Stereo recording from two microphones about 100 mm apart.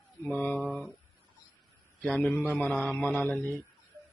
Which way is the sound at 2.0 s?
5° left (ahead or behind).